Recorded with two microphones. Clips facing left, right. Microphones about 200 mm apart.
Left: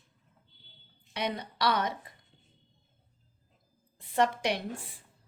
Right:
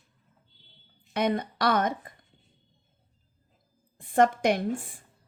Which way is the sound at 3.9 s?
50° right (ahead or behind).